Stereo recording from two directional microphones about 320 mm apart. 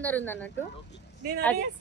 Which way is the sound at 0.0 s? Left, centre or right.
Centre.